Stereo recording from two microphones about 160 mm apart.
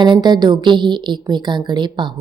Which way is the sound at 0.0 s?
30° right (ahead or behind).